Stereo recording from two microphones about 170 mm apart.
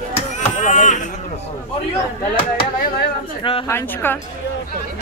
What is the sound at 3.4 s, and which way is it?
Speech, 30° left (ahead or behind).